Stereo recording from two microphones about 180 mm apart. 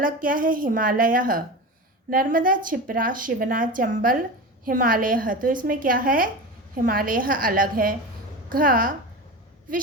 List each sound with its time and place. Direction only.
0.0 s a woman's voice: 50° right (ahead or behind)